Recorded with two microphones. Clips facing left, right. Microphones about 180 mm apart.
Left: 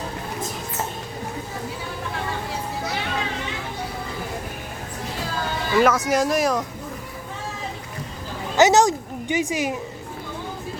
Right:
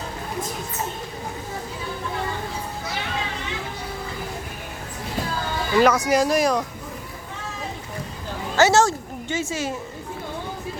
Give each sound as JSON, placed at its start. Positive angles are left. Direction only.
{"t": 5.7, "sound": "speech", "side_deg": 0}
{"t": 8.5, "sound": "speech", "side_deg": 15}